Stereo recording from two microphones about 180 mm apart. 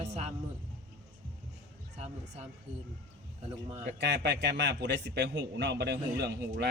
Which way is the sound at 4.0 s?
75° right (ahead or behind).